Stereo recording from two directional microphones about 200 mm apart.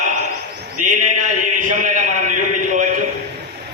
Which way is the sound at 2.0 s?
40° right (ahead or behind).